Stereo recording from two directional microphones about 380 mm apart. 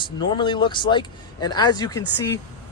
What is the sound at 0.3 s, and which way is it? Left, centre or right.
Speech, centre.